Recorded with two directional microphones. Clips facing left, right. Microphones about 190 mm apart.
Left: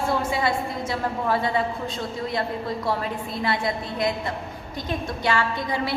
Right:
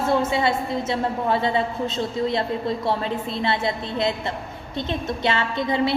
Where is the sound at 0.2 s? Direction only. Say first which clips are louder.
Right 3 dB; 25° right (ahead or behind).